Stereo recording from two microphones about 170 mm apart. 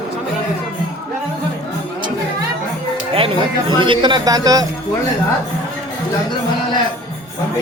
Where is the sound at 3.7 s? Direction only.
30° right (ahead or behind).